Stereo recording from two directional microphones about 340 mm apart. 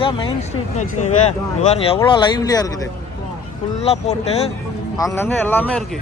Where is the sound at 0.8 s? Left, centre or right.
Left.